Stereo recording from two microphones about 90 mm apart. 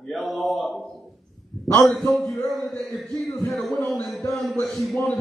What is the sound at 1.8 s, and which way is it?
Speech, centre (ahead or behind).